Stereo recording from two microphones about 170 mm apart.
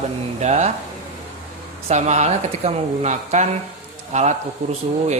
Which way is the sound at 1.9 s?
40° right (ahead or behind).